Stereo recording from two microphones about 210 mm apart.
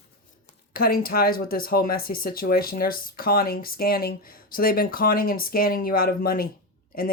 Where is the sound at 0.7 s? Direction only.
45° left (ahead or behind).